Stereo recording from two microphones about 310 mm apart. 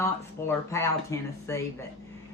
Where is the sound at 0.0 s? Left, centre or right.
Centre.